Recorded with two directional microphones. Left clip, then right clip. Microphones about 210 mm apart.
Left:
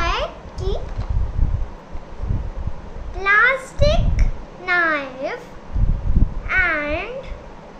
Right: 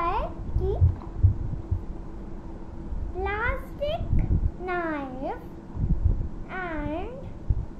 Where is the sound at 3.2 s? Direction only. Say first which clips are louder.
Left 14 dB; 20° left (ahead or behind).